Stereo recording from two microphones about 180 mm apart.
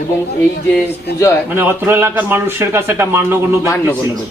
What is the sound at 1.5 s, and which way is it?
A man's voice, 10° right (ahead or behind).